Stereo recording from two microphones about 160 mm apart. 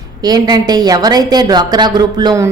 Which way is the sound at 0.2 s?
25° right (ahead or behind).